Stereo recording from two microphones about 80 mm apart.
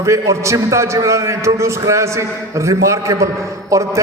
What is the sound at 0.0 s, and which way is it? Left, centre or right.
A man's voice, right.